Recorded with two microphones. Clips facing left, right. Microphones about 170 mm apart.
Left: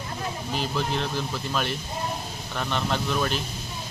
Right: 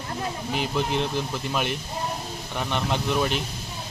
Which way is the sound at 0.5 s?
15° right (ahead or behind).